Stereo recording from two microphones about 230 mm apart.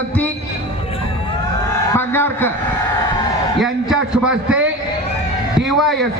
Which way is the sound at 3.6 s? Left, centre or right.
Centre.